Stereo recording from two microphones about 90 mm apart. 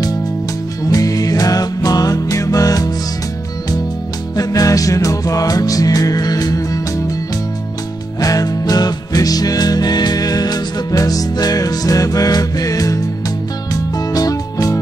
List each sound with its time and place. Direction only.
0.8 s music: 40° left (ahead or behind)
4.4 s music: 40° left (ahead or behind)
8.2 s music: 40° left (ahead or behind)